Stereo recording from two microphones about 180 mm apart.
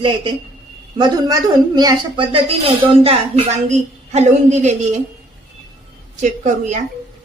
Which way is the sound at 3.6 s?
40° right (ahead or behind).